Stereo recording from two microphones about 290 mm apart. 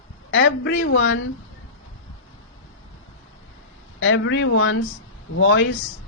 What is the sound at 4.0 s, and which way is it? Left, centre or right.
Speech, left.